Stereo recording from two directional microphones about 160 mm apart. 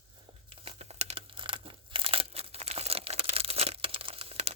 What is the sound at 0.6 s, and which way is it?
Crumpling, 40° right (ahead or behind).